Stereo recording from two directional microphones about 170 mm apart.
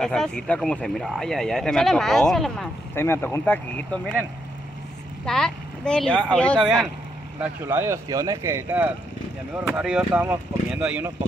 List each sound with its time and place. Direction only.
0.0 s speech: 5° left (ahead or behind)
2.9 s speech: 15° left (ahead or behind)
5.2 s speech: 5° left (ahead or behind)
7.3 s speech: 15° right (ahead or behind)